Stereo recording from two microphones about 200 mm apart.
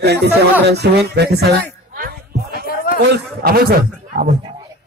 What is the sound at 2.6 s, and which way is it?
Music, 45° left (ahead or behind).